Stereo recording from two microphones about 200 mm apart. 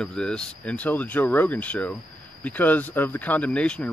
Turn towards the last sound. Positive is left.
turn(degrees=5)  # may be behind; listen again after turning